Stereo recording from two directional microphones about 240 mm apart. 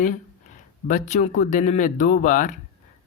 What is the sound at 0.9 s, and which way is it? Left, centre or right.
Speech, left.